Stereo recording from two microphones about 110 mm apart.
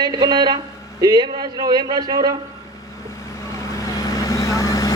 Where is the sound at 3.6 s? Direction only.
30° left (ahead or behind).